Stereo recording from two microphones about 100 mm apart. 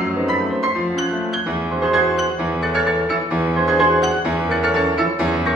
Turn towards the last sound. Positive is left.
turn(degrees=-5)  # may be behind; listen again after turning